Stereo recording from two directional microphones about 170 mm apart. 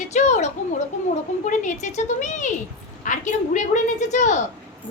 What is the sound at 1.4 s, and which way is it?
A woman's voice, 45° left (ahead or behind).